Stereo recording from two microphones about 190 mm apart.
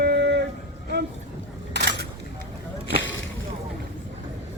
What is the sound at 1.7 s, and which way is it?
Single-lens reflex camera, 65° right (ahead or behind).